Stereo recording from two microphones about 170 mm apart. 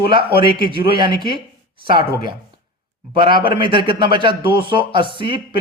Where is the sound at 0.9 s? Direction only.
30° right (ahead or behind).